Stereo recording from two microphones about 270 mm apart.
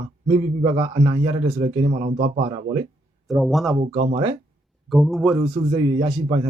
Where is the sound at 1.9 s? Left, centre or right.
Right.